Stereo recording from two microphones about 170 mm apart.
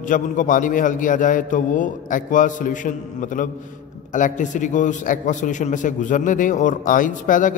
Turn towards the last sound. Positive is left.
turn(degrees=50)  # may be behind; listen again after turning